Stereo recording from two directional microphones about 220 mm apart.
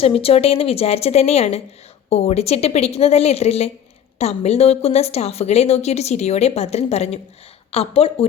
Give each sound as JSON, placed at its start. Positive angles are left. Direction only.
{"t": 0.0, "sound": "a woman's voice", "side_deg": 25}